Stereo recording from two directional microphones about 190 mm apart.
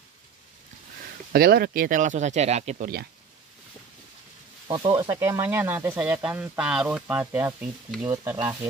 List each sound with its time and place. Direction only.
1.3 s speech: 55° right (ahead or behind); by 2.9 s 35° right (ahead or behind)
4.6 s speech: 25° right (ahead or behind)
5.1 s speech: 15° right (ahead or behind)
8.1 s speech: 20° right (ahead or behind)